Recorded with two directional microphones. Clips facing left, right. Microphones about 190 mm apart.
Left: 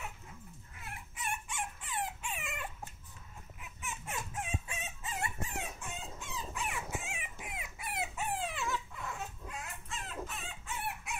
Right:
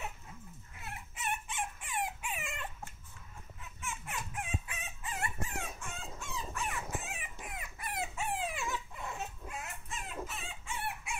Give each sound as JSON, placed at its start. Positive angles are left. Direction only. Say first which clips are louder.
{"t": 1.1, "sound": "chicken", "louder": "right 2 dB", "side_deg": -20}
{"t": 2.5, "sound": "dog", "louder": "left 1 dB", "side_deg": 10}
{"t": 3.6, "sound": "chicken", "louder": "even", "side_deg": 20}
{"t": 8.4, "sound": "dog", "louder": "even", "side_deg": -15}
{"t": 10.0, "sound": "chicken", "louder": "right 1 dB", "side_deg": -5}